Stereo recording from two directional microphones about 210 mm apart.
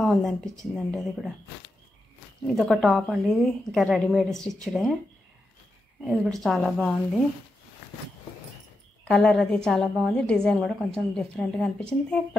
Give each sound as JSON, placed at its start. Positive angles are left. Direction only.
{"t": 0.0, "sound": "a woman's voice", "side_deg": 0}
{"t": 2.4, "sound": "a woman's voice", "side_deg": 0}
{"t": 6.0, "sound": "a woman's voice", "side_deg": 0}
{"t": 9.0, "sound": "a woman's voice", "side_deg": 5}